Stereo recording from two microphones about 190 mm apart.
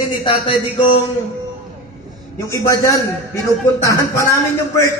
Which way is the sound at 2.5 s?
15° left (ahead or behind).